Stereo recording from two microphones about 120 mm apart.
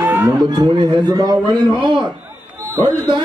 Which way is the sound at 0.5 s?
35° right (ahead or behind).